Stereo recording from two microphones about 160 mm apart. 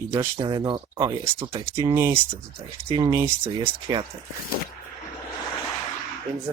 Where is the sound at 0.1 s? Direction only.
20° right (ahead or behind).